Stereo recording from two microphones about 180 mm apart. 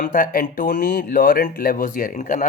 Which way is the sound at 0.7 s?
60° left (ahead or behind).